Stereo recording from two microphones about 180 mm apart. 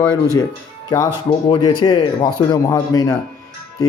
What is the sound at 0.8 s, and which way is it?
Speech, 20° left (ahead or behind).